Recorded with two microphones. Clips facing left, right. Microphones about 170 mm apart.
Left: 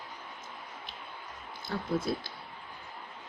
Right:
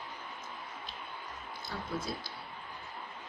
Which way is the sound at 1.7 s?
55° left (ahead or behind).